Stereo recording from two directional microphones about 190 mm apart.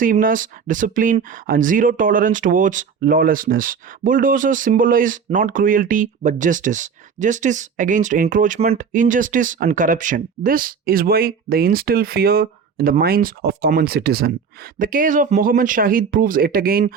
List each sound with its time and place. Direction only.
0.0 s speech: 45° right (ahead or behind)